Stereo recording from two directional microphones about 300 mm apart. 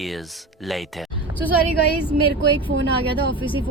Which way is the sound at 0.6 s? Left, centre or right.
Centre.